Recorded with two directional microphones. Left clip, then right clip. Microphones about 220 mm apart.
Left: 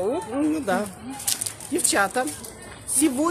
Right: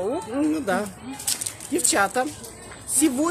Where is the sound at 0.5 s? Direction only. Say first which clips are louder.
Even; 15° right (ahead or behind).